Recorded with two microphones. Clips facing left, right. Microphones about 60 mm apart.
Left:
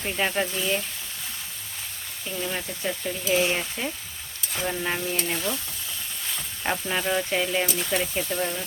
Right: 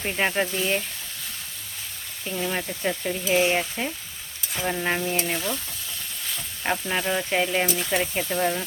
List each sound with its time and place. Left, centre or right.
0.0 s speech: right
2.3 s speech: centre
6.6 s speech: centre
7.3 s speech: centre